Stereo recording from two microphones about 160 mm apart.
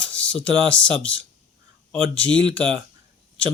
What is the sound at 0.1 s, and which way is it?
Speech, 5° left (ahead or behind).